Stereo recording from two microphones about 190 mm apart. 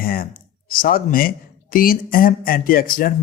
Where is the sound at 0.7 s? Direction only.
50° left (ahead or behind).